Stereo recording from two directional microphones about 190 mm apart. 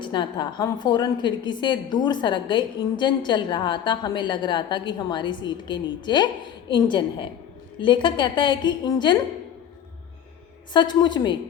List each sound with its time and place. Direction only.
0.0 s a woman's voice: 25° left (ahead or behind)
10.8 s a woman's voice: 25° left (ahead or behind)